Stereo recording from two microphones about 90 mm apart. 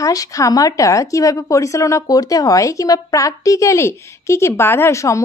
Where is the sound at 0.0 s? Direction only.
40° left (ahead or behind).